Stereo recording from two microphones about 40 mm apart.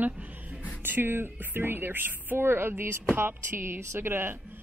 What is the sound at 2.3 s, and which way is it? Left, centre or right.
Speech, right.